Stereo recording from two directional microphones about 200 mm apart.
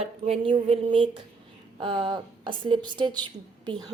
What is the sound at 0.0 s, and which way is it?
A woman's voice, 30° right (ahead or behind).